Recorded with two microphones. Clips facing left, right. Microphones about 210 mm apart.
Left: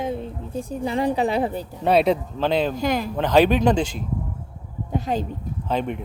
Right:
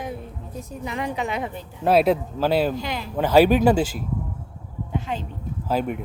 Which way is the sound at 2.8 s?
45° left (ahead or behind).